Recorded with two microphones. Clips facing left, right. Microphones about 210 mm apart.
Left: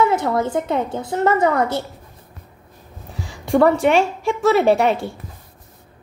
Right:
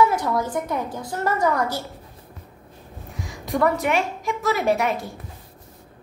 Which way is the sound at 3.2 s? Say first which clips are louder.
Left 2 dB; 30° left (ahead or behind).